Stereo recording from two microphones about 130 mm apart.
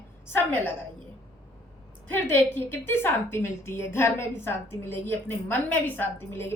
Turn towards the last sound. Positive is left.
turn(degrees=20)  # may be behind; listen again after turning